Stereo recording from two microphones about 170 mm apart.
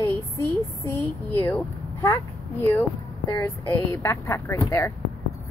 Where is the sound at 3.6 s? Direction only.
15° left (ahead or behind).